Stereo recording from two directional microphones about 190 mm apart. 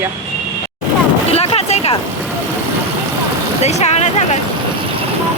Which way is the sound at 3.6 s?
35° left (ahead or behind).